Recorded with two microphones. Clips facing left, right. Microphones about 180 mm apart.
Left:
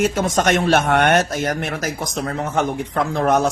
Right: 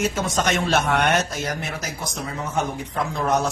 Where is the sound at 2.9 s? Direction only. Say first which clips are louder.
Left 5 dB; 90° left.